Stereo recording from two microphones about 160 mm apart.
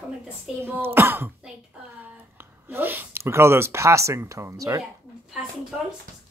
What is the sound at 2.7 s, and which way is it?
Speech, 10° right (ahead or behind).